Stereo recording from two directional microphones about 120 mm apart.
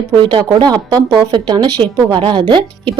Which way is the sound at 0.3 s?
40° right (ahead or behind).